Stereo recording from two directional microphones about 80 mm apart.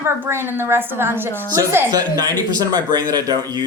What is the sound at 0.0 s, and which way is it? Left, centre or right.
A woman's voice, right.